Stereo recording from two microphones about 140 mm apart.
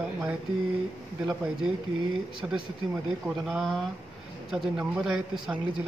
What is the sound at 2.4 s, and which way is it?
Speech, 10° right (ahead or behind).